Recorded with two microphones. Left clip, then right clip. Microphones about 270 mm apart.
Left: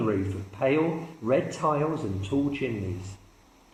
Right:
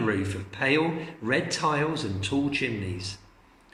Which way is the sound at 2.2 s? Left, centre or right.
Right.